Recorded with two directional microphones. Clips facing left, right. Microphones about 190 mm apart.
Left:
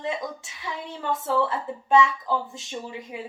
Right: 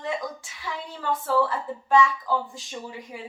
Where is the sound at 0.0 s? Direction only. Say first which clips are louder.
Even; 25° left (ahead or behind).